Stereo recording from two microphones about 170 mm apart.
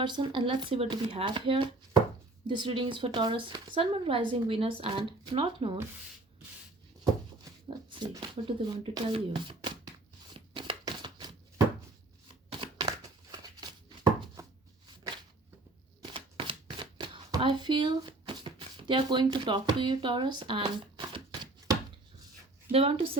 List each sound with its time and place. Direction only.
0.0 s speech: 25° right (ahead or behind)
7.5 s a sound: 20° right (ahead or behind)
7.9 s speech: 25° right (ahead or behind)
10.5 s a sound: 30° right (ahead or behind)
16.1 s shuffling cards: 30° right (ahead or behind)
22.7 s a woman's voice: 35° right (ahead or behind)